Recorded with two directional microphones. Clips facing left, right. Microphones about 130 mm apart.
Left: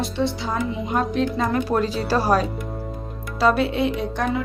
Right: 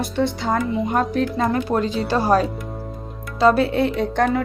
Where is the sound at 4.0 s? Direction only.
55° right (ahead or behind).